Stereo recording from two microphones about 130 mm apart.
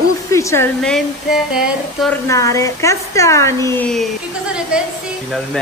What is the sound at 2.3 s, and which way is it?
Speech, 25° left (ahead or behind).